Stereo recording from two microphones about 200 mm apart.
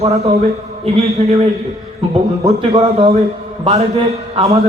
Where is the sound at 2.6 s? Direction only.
30° right (ahead or behind).